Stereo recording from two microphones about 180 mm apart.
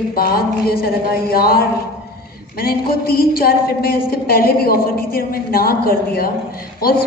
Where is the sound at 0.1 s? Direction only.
55° left (ahead or behind).